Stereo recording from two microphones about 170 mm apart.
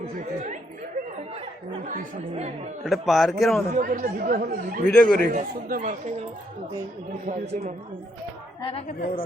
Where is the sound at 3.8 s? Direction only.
50° right (ahead or behind).